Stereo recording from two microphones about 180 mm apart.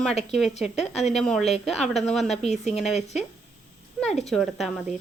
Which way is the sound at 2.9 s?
40° left (ahead or behind).